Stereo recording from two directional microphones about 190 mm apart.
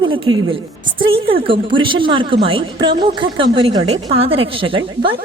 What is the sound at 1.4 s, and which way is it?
A woman's voice, 25° right (ahead or behind).